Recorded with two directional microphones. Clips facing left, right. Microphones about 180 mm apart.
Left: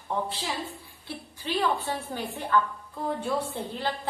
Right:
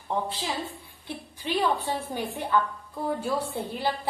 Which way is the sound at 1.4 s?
15° right (ahead or behind).